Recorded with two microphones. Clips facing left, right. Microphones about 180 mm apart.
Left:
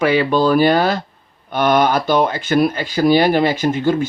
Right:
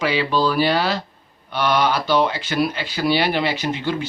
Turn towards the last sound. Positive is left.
turn(degrees=45)  # may be behind; listen again after turning